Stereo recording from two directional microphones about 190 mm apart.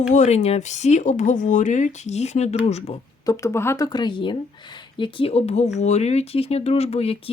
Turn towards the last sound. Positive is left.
turn(degrees=30)  # may be behind; listen again after turning